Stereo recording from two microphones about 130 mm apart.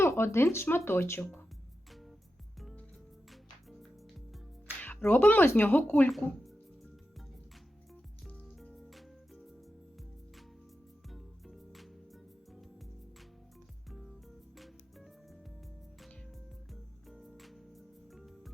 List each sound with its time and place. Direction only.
0.0 s speech: 20° left (ahead or behind)
1.9 s music: centre (ahead or behind)
4.8 s speech: 15° left (ahead or behind)
6.1 s speech: centre (ahead or behind)
8.2 s music: 5° left (ahead or behind)
11.1 s music: centre (ahead or behind)
13.9 s music: centre (ahead or behind)